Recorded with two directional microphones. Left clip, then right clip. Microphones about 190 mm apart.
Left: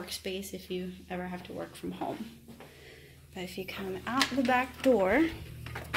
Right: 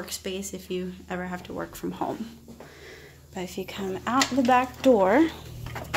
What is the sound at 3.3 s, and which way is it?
A woman's voice, 15° right (ahead or behind).